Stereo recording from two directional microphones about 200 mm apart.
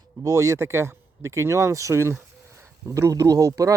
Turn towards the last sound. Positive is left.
turn(degrees=-15)  # may be behind; listen again after turning